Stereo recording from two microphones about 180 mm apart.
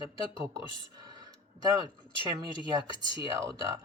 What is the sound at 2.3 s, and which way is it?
Speech, 25° right (ahead or behind).